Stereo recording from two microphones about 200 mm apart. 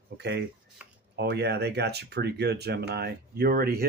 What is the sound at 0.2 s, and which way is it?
Speech, 55° right (ahead or behind).